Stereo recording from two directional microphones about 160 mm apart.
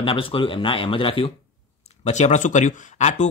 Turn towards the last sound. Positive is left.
turn(degrees=45)  # may be behind; listen again after turning